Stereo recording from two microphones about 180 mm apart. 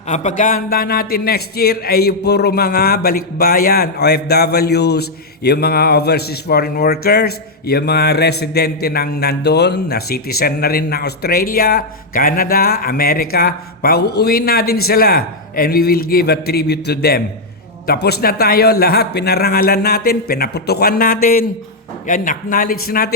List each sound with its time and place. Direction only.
0.1 s a man's voice: 40° left (ahead or behind)